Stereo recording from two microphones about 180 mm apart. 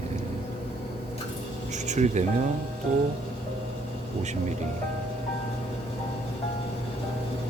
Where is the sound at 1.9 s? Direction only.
40° right (ahead or behind).